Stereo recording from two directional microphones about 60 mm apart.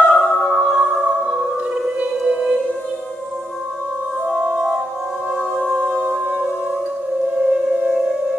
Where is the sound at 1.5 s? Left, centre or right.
Centre.